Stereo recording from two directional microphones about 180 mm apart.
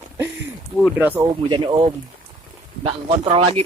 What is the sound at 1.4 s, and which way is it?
Speech, 25° right (ahead or behind).